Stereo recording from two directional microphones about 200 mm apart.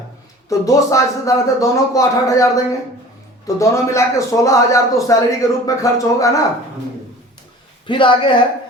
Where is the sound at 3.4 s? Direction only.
15° left (ahead or behind).